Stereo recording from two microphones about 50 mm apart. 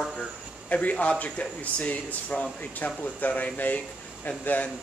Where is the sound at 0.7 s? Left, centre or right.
Left.